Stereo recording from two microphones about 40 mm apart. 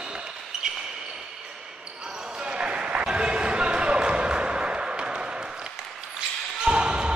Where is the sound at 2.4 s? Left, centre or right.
Right.